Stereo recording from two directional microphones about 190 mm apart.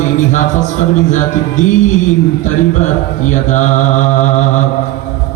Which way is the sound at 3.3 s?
40° left (ahead or behind).